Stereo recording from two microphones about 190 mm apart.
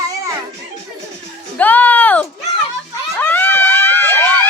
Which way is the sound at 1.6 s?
10° left (ahead or behind).